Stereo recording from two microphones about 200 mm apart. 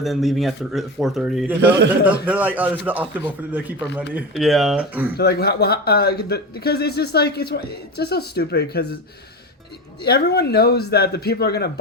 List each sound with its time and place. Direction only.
0.0 s speech: centre (ahead or behind)
1.6 s a man's voice: 60° right (ahead or behind)
2.0 s speech: 5° right (ahead or behind)
5.1 s speech: 50° left (ahead or behind)
10.0 s speech: 50° left (ahead or behind)